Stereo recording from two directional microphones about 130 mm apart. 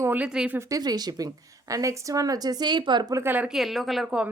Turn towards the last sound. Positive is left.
turn(degrees=-5)  # may be behind; listen again after turning